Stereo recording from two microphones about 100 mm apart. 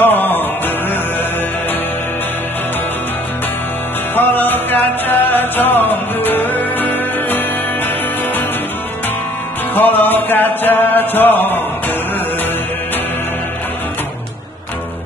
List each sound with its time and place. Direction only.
0.0 s music: 20° left (ahead or behind)
4.1 s music: 20° left (ahead or behind)
9.8 s chant: 20° left (ahead or behind)